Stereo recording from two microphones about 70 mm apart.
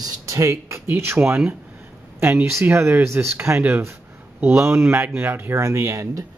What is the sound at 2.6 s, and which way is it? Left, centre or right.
Speech, right.